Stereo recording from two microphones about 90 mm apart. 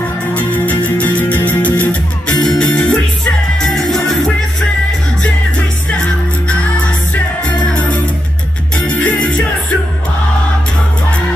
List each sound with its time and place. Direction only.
0.3 s music: 20° left (ahead or behind)
7.4 s music: 15° left (ahead or behind)